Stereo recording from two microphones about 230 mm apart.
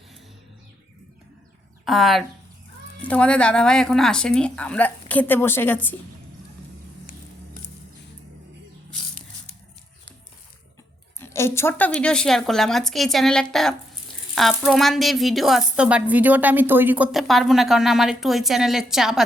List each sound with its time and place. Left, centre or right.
1.8 s a woman's voice: centre
11.2 s a woman's voice: centre